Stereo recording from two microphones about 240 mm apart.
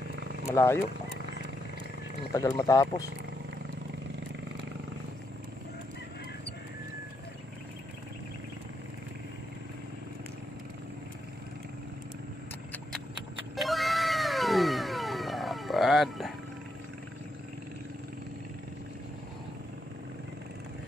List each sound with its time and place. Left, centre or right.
0.5 s speech: centre
1.1 s wild animals: right
2.5 s speech: centre
13.6 s cat: centre